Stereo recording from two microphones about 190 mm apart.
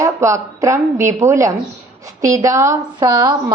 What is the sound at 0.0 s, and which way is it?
A woman's voice, 15° right (ahead or behind).